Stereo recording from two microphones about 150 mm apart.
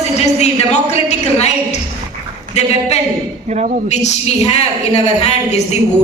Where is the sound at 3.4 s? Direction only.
50° right (ahead or behind).